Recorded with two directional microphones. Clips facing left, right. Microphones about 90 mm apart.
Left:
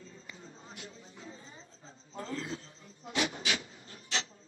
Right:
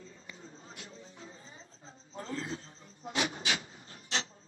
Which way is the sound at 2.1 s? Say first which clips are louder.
Even; 35° right (ahead or behind).